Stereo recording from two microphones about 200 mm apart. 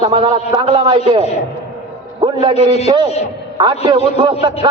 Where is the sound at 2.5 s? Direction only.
30° left (ahead or behind).